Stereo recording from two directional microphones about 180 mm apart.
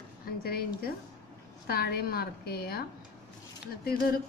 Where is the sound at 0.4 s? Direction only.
60° left (ahead or behind).